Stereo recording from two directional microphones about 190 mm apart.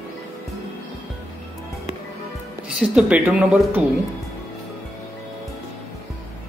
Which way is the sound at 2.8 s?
5° right (ahead or behind).